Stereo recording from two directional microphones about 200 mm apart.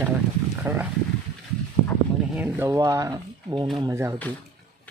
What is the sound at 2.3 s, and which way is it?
Speech, 10° right (ahead or behind).